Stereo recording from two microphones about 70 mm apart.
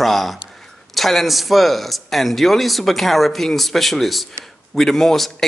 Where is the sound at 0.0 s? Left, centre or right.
Centre.